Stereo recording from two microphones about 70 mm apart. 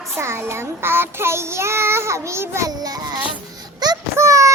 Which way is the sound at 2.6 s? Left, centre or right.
Right.